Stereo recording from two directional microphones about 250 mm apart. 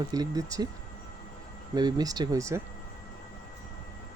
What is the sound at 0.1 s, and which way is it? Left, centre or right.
Speech, centre.